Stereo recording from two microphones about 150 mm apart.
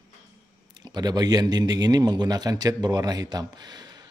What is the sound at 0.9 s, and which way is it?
Speech, 25° right (ahead or behind).